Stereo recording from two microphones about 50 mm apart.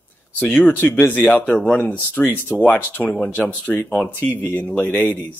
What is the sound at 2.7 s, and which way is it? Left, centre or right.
Speech, left.